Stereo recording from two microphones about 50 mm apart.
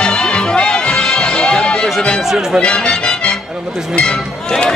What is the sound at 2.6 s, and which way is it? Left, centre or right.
Speech, centre.